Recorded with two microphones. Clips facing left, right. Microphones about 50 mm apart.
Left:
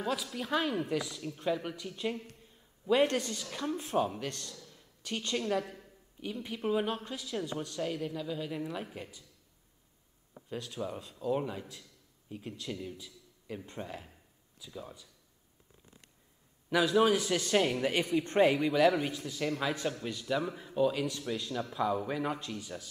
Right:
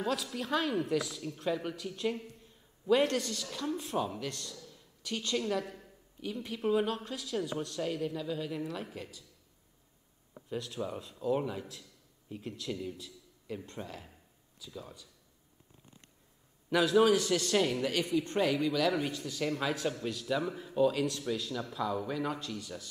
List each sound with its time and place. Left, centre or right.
0.0 s speech: centre
2.9 s speech: centre
5.0 s a woman's voice: left
5.3 s speech: centre
10.7 s a man's voice: centre
16.6 s speech: centre